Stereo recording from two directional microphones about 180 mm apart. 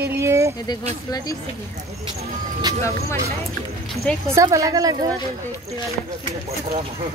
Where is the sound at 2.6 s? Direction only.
20° right (ahead or behind).